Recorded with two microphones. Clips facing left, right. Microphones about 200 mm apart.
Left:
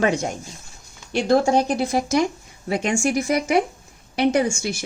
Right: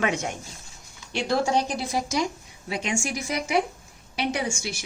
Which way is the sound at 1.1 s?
45° left (ahead or behind).